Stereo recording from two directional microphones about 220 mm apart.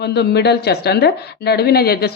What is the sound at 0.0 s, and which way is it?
A woman's voice, 50° left (ahead or behind).